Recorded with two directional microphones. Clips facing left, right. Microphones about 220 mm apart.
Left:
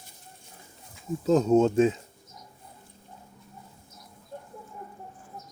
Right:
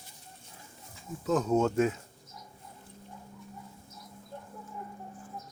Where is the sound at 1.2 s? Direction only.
25° left (ahead or behind).